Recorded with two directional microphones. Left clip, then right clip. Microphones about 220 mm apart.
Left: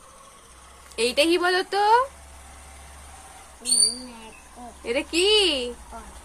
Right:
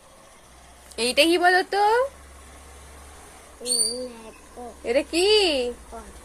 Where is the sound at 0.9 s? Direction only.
5° left (ahead or behind).